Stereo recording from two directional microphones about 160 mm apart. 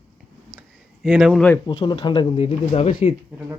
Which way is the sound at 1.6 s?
30° left (ahead or behind).